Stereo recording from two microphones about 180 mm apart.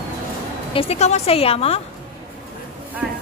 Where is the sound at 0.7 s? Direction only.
30° left (ahead or behind).